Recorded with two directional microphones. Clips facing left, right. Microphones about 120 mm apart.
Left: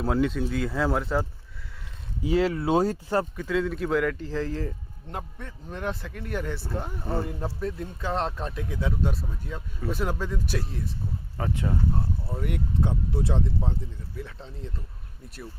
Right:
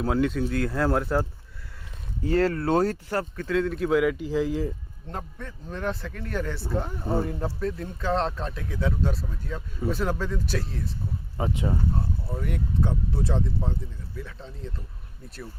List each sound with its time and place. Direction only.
0.0 s speech: centre (ahead or behind); by 3.4 s 15° left (ahead or behind)
3.4 s a man's voice: centre (ahead or behind)
5.1 s speech: 20° left (ahead or behind)
7.0 s a man's voice: 10° right (ahead or behind)
7.6 s speech: 15° left (ahead or behind)
11.3 s speech: 20° right (ahead or behind)
12.8 s speech: 20° left (ahead or behind)